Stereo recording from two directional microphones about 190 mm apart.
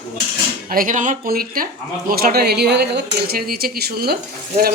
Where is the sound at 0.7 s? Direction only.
45° right (ahead or behind).